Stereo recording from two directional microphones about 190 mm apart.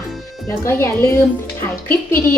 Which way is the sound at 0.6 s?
15° left (ahead or behind).